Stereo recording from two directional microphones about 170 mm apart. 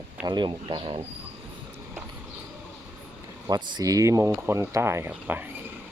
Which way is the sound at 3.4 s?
20° right (ahead or behind).